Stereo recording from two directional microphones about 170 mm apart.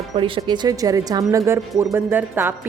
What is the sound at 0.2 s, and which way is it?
A woman's voice, 30° right (ahead or behind).